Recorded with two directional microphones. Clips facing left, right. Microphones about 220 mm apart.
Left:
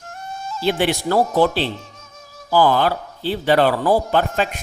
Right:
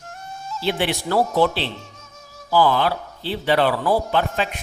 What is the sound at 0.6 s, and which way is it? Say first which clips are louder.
Speech: left 4 dB; 45° left (ahead or behind).